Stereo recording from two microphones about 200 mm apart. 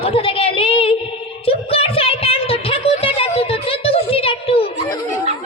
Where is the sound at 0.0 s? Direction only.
25° left (ahead or behind).